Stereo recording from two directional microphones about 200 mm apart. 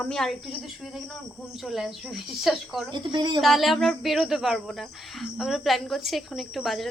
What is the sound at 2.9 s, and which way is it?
Speech, 25° right (ahead or behind).